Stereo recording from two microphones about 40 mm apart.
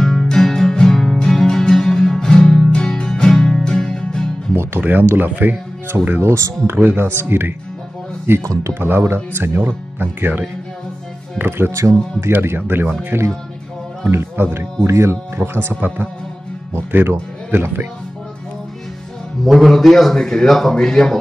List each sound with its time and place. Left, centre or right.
0.0 s music: centre
4.6 s speech: right
7.0 s speech: right
9.7 s speech: right
11.3 s speech: right
14.1 s speech: right
15.3 s speech: right
15.7 s speech: right
19.4 s a man's voice: centre
20.2 s speech: centre